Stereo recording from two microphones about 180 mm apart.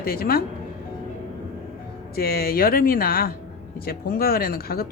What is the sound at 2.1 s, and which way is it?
A woman's voice, 60° left (ahead or behind).